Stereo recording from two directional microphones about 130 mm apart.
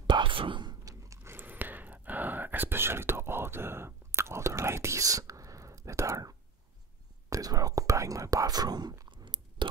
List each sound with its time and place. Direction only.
0.0 s whispering: 40° right (ahead or behind)